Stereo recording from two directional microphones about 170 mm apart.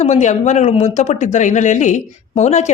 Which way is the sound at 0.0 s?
40° left (ahead or behind).